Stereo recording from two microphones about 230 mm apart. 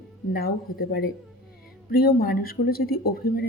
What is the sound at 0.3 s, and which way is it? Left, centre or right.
Speech, left.